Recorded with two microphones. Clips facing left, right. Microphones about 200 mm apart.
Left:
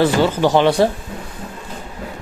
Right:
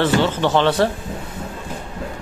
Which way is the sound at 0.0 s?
10° left (ahead or behind).